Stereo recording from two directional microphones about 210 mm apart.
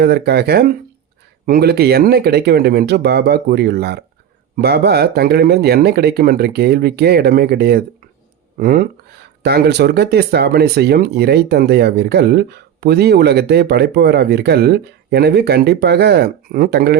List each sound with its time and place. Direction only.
0.0 s speech: 50° right (ahead or behind)